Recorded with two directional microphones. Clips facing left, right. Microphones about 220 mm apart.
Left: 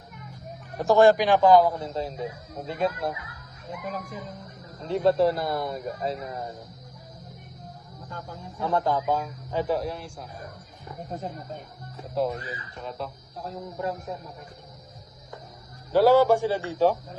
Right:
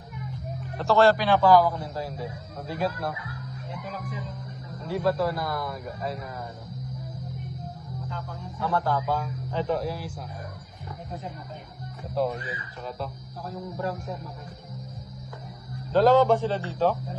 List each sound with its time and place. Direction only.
0.7 s a man's voice: 15° left (ahead or behind)
3.8 s speech: 45° left (ahead or behind)
4.7 s a man's voice: 25° left (ahead or behind)
8.6 s a man's voice: 20° left (ahead or behind)
9.8 s speech: 5° right (ahead or behind)
11.0 s speech: 45° left (ahead or behind)
12.1 s speech: centre (ahead or behind)
15.9 s a man's voice: 10° left (ahead or behind)